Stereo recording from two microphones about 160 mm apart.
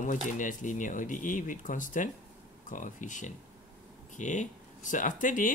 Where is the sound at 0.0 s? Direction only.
55° left (ahead or behind).